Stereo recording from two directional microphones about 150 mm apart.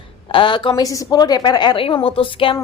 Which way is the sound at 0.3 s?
35° left (ahead or behind).